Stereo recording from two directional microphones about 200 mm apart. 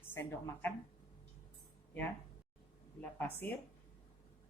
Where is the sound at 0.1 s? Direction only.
10° left (ahead or behind).